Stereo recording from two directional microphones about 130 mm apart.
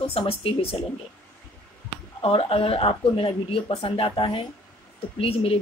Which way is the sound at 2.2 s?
50° left (ahead or behind).